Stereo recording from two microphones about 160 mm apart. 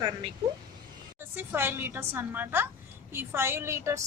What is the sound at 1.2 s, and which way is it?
A woman's voice, 15° right (ahead or behind).